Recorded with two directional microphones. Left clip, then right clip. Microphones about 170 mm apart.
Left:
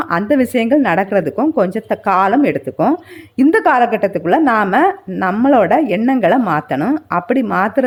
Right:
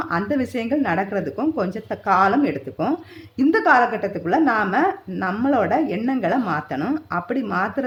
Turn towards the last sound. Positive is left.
turn(degrees=50)  # may be behind; listen again after turning